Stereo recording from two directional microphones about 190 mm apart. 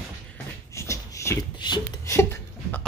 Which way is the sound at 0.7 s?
15° left (ahead or behind).